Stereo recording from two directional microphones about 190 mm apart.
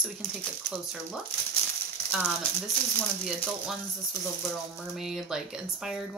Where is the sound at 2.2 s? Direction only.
10° left (ahead or behind).